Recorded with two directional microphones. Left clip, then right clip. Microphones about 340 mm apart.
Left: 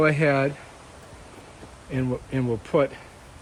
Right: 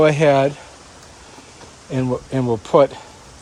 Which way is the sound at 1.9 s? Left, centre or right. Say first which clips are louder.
Right 7 dB; centre.